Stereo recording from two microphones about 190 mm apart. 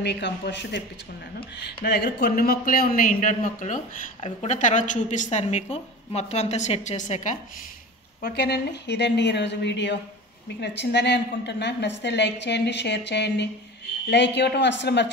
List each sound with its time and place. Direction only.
0.0 s a woman's voice: 65° left (ahead or behind); by 7.3 s 40° left (ahead or behind)
8.2 s a woman's voice: 60° left (ahead or behind)